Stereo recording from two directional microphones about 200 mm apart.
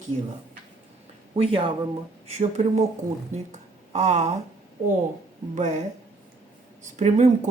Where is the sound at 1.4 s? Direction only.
25° right (ahead or behind).